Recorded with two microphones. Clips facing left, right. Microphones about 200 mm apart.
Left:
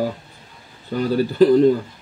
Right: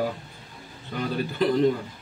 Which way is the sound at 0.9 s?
35° left (ahead or behind).